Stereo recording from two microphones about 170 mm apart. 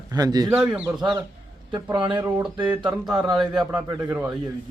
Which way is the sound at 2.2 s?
10° right (ahead or behind).